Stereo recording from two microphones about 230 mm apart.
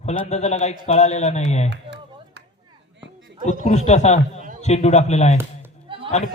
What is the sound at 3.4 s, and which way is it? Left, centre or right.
Speech, left.